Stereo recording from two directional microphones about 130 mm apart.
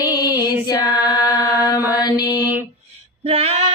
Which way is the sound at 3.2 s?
50° right (ahead or behind).